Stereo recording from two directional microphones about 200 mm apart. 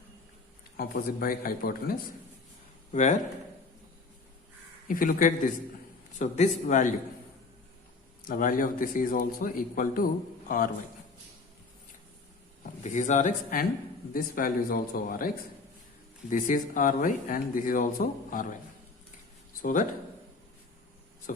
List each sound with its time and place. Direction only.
0.8 s speech: 45° left (ahead or behind)
4.9 s speech: 45° left (ahead or behind)
8.3 s speech: 45° left (ahead or behind)
12.8 s speech: 35° left (ahead or behind)
16.3 s speech: 40° left (ahead or behind)
19.6 s speech: 40° left (ahead or behind)
21.3 s speech: 40° left (ahead or behind)